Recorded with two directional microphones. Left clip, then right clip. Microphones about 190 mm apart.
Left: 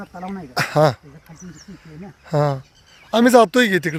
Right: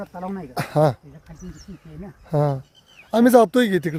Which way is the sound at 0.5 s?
5° right (ahead or behind).